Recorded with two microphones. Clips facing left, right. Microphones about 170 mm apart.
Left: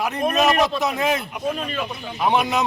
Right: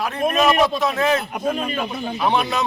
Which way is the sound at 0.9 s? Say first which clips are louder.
Right 3 dB; 15° left (ahead or behind).